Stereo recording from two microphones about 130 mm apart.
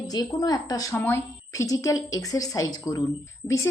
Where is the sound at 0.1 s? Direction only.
30° left (ahead or behind).